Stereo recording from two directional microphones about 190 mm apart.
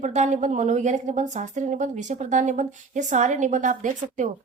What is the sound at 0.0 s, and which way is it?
A woman's voice, 40° right (ahead or behind).